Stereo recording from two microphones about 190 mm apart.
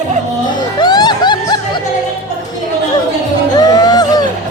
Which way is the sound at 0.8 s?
20° left (ahead or behind).